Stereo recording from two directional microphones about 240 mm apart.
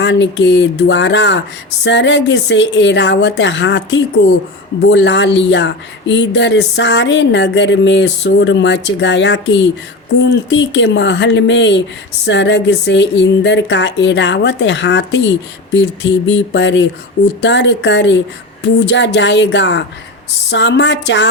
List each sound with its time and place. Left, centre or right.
0.0 s speech: left